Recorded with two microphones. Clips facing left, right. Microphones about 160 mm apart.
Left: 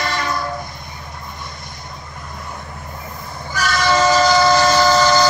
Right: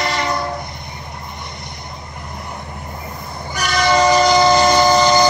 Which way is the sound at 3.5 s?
15° right (ahead or behind).